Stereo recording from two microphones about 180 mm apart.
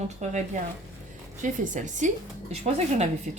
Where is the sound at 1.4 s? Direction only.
45° right (ahead or behind).